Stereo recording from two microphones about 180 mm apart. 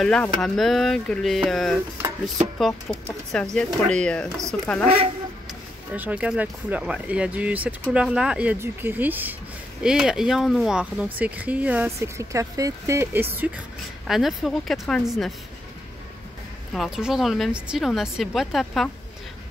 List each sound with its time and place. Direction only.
0.0 s speech: 5° left (ahead or behind)
4.8 s speech: 30° right (ahead or behind)
5.9 s speech: 5° right (ahead or behind)
16.7 s speech: centre (ahead or behind)